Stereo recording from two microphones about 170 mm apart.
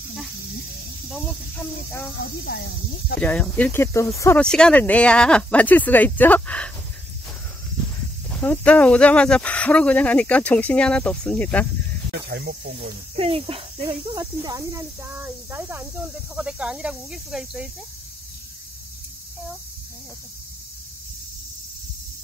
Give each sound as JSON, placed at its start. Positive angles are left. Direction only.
{"t": 1.9, "sound": "speech", "side_deg": 15}
{"t": 2.1, "sound": "speech", "side_deg": 75}
{"t": 3.2, "sound": "speech", "side_deg": 10}
{"t": 8.3, "sound": "speech", "side_deg": 10}
{"t": 12.1, "sound": "speech", "side_deg": -75}
{"t": 13.1, "sound": "speech", "side_deg": -35}
{"t": 14.4, "sound": "speech", "side_deg": -20}